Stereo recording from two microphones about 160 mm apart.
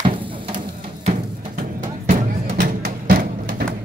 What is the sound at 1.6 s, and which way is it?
Music, 60° right (ahead or behind).